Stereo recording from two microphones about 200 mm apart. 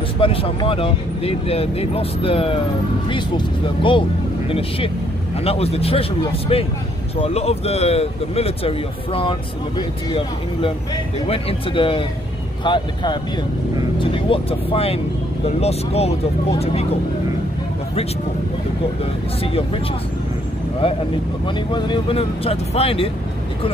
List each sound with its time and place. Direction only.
0.2 s speech: 25° left (ahead or behind)
19.4 s speech: 30° left (ahead or behind)
20.8 s speech: 25° left (ahead or behind)